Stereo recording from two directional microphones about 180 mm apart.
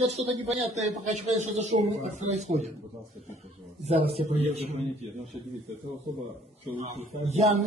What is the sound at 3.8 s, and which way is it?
A man's voice, 35° right (ahead or behind).